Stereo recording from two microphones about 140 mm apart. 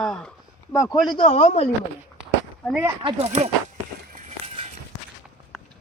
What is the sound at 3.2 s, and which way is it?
Speech, 50° right (ahead or behind).